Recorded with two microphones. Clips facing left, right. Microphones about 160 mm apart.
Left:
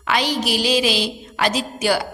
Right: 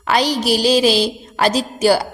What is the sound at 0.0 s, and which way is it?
A woman's voice, 40° right (ahead or behind).